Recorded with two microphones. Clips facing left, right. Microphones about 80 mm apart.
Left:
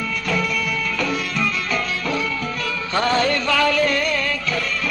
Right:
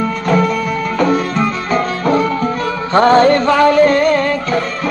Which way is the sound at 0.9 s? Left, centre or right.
Right.